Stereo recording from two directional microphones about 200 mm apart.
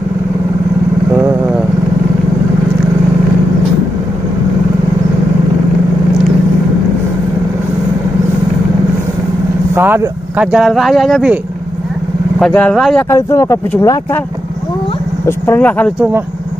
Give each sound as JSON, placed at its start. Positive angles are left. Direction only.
{"t": 1.1, "sound": "vehicle", "side_deg": -10}
{"t": 9.8, "sound": "speech", "side_deg": -10}
{"t": 12.4, "sound": "speech", "side_deg": 5}
{"t": 13.1, "sound": "speech", "side_deg": 15}
{"t": 15.2, "sound": "speech", "side_deg": 10}